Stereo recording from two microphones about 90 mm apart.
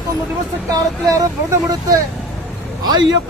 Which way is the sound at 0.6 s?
40° right (ahead or behind).